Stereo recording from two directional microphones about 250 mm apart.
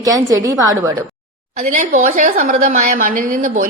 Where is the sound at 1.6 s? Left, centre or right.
Right.